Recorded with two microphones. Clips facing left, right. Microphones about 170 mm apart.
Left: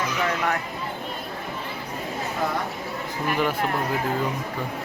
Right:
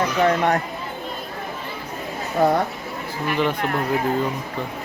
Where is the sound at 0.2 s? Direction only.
35° right (ahead or behind).